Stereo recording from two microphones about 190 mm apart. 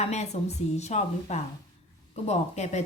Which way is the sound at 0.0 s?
35° left (ahead or behind).